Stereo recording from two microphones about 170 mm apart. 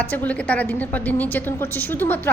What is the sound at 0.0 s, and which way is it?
A woman's voice, 10° left (ahead or behind).